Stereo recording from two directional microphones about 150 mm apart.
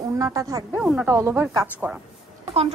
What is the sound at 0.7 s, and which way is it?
Speech, 5° right (ahead or behind).